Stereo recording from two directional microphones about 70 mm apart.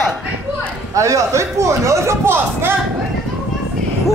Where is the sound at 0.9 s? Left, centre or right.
Right.